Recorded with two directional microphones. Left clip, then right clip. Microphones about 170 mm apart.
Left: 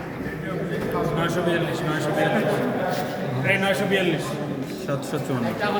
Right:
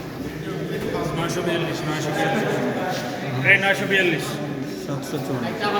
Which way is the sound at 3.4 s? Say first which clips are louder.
Right 5 dB; 90° left.